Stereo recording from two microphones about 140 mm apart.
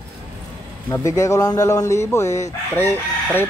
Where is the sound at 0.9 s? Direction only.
20° left (ahead or behind).